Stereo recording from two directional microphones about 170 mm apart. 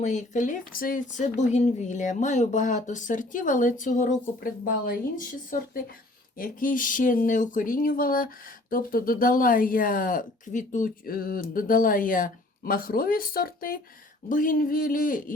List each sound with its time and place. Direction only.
0.0 s speech: 45° left (ahead or behind)